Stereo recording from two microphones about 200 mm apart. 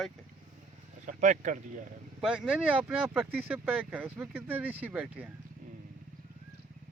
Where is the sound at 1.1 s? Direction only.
40° right (ahead or behind).